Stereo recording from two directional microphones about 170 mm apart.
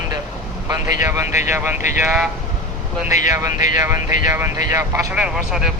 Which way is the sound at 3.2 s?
20° right (ahead or behind).